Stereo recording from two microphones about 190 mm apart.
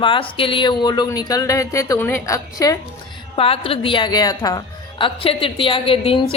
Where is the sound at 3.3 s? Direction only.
30° left (ahead or behind).